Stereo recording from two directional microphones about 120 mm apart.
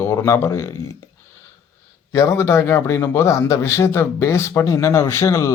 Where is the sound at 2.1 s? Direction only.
25° left (ahead or behind).